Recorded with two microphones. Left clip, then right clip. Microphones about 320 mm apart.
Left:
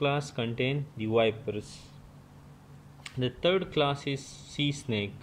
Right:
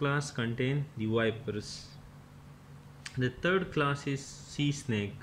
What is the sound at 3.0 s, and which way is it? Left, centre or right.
Speech, centre.